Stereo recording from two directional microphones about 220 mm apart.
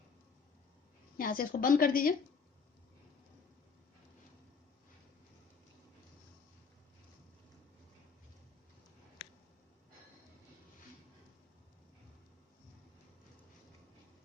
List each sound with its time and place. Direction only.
1.1 s speech: 40° left (ahead or behind)